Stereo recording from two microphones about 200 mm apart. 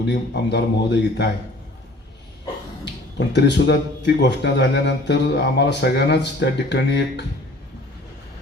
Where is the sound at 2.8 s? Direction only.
60° left (ahead or behind).